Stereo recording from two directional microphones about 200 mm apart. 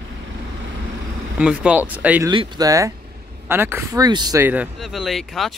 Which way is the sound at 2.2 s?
20° right (ahead or behind).